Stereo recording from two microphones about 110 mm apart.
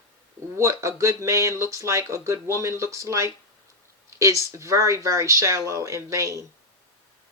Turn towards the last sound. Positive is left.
turn(degrees=-30)  # may be behind; listen again after turning